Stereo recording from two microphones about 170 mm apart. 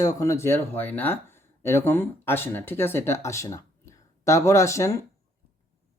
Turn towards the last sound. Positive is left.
turn(degrees=15)  # may be behind; listen again after turning